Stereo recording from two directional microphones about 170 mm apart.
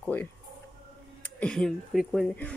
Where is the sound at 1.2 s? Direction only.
10° left (ahead or behind).